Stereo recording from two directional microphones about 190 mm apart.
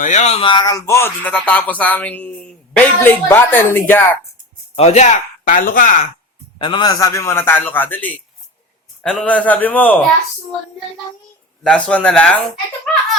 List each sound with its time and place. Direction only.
0.0 s speech: 40° left (ahead or behind); by 4.2 s 10° left (ahead or behind)
4.8 s speech: 35° left (ahead or behind)
6.6 s speech: 25° left (ahead or behind); by 10.0 s 10° left (ahead or behind)
11.6 s speech: 5° left (ahead or behind)